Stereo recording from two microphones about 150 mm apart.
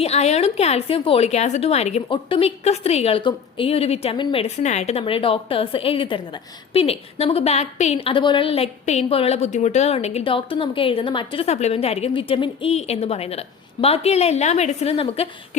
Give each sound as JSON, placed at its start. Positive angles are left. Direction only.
{"t": 0.0, "sound": "a woman's voice", "side_deg": 45}